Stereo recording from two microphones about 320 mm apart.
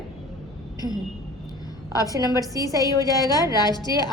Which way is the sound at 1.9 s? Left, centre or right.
Centre.